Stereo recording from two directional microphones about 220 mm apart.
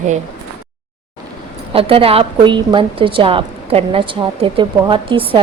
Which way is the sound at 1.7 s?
25° right (ahead or behind).